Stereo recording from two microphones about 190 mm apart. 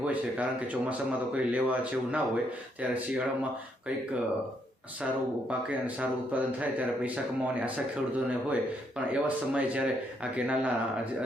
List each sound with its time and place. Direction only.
0.0 s speech: 10° right (ahead or behind)
5.5 s speech: 5° right (ahead or behind)
9.1 s speech: 5° right (ahead or behind)